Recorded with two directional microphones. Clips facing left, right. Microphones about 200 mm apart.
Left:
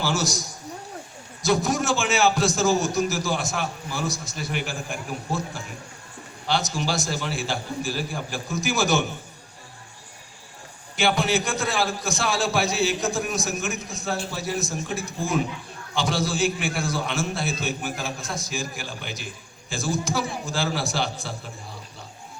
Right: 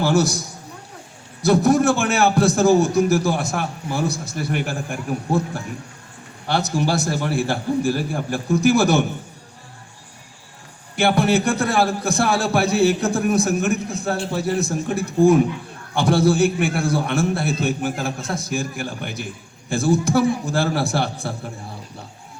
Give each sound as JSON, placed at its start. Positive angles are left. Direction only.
{"t": 0.0, "sound": "a man's voice", "side_deg": -60}
{"t": 10.9, "sound": "a man's voice", "side_deg": -60}